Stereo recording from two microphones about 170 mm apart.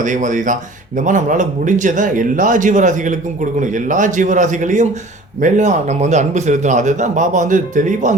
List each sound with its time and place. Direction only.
0.0 s speech: 50° right (ahead or behind)